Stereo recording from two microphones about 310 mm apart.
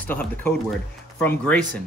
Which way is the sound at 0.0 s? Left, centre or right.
Centre.